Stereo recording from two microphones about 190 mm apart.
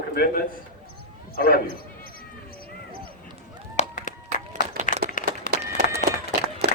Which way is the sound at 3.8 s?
40° left (ahead or behind).